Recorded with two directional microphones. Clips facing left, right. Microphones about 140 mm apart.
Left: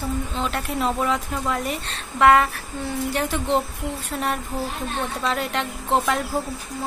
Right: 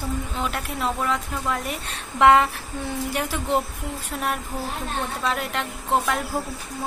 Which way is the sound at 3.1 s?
5° right (ahead or behind).